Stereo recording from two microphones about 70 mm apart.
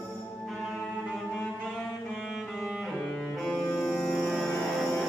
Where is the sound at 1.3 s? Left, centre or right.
Centre.